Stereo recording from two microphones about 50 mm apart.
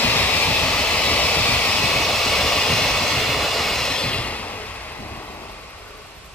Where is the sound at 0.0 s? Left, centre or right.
Left.